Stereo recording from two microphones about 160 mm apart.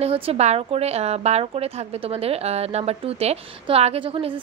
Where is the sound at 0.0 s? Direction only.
40° right (ahead or behind).